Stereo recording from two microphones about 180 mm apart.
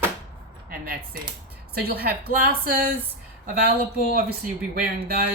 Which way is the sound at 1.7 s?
55° right (ahead or behind).